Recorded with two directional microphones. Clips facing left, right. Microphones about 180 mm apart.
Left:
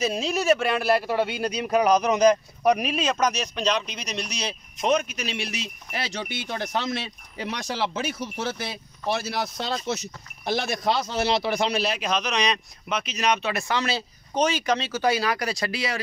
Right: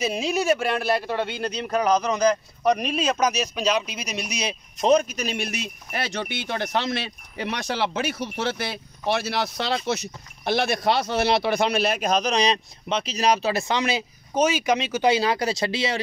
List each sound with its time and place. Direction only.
0.0 s speech: centre (ahead or behind)
4.8 s speech: 35° right (ahead or behind)